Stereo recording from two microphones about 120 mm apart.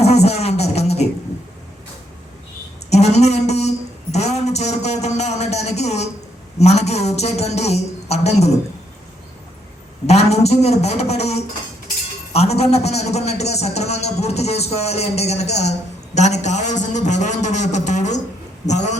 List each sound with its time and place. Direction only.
0.0 s music: 65° left (ahead or behind)
2.9 s a sound: 65° left (ahead or behind)
6.6 s a man's voice: 65° left (ahead or behind)
10.1 s a man's voice: 65° left (ahead or behind)